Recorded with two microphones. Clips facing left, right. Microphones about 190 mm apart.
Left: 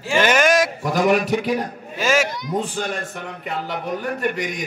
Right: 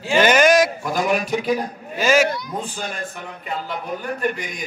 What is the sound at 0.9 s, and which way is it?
Speech, 75° left (ahead or behind).